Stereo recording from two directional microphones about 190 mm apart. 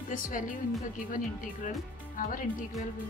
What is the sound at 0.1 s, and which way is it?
Speech, 45° left (ahead or behind).